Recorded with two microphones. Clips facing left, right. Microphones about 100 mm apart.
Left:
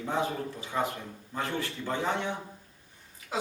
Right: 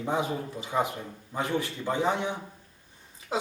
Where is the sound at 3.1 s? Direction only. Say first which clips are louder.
Right 3 dB; 25° right (ahead or behind).